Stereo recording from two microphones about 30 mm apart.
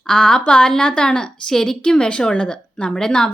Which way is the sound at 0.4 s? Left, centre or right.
Left.